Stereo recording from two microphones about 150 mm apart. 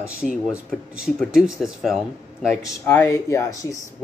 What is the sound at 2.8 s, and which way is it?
Speech, 15° left (ahead or behind).